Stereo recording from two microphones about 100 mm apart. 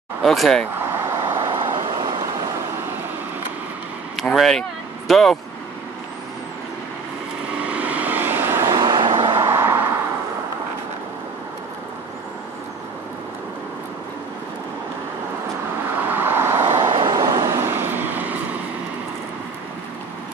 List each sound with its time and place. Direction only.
0.2 s speech: centre (ahead or behind)
1.0 s vehicle: 30° right (ahead or behind)
1.5 s vehicle: 50° right (ahead or behind)
4.2 s speech: centre (ahead or behind)
7.6 s vehicle: 15° right (ahead or behind)
8.8 s vehicle: 50° right (ahead or behind)
9.3 s vehicle: 30° right (ahead or behind)
16.1 s vehicle: 20° right (ahead or behind)
16.9 s vehicle: 45° right (ahead or behind); by 18.3 s 20° right (ahead or behind)